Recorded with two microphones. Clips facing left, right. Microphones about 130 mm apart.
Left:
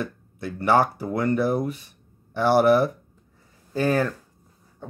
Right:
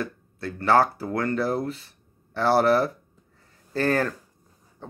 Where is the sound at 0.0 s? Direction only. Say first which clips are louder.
Even; 20° left (ahead or behind).